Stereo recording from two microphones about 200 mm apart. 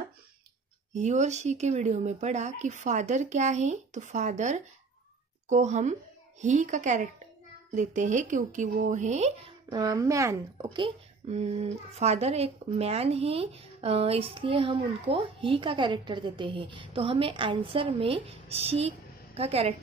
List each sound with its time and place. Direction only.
0.9 s speech: 35° right (ahead or behind)
9.7 s speech: 20° right (ahead or behind)
11.2 s speech: 30° right (ahead or behind)